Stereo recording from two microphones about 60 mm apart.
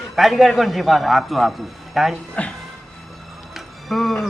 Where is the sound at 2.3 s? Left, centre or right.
Left.